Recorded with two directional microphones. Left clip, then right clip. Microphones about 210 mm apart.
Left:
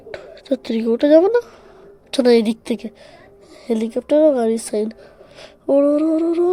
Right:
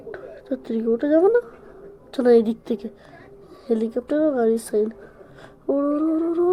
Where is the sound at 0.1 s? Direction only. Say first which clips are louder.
Left 7 dB; 25° left (ahead or behind).